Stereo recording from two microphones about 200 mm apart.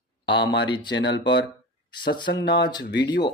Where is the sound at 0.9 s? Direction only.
60° left (ahead or behind).